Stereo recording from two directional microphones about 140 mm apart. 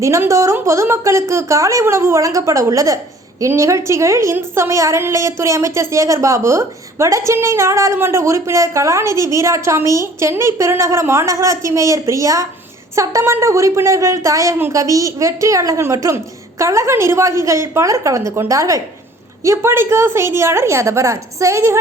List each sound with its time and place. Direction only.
0.0 s a woman's voice: 20° right (ahead or behind)